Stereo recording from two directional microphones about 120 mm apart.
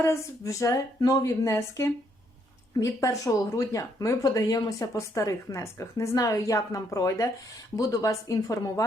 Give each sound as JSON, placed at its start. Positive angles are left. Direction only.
{"t": 0.0, "sound": "speech", "side_deg": 25}